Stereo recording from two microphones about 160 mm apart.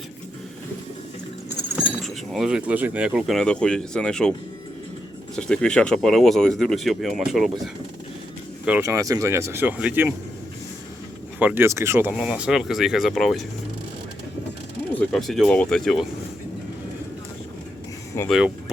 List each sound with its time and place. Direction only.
2.0 s speech: centre (ahead or behind)
5.4 s speech: 5° left (ahead or behind)
8.8 s speech: 20° right (ahead or behind)
11.3 s speech: 10° right (ahead or behind)
14.9 s speech: centre (ahead or behind)
18.3 s speech: 5° right (ahead or behind)